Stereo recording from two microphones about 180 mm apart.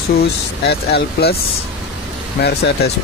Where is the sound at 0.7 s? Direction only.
60° left (ahead or behind).